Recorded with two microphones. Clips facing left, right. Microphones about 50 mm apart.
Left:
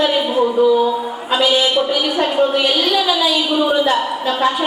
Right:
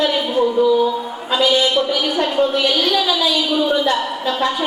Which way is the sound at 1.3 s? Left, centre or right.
Centre.